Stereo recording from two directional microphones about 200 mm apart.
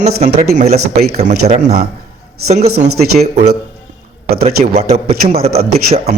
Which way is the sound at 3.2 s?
35° right (ahead or behind).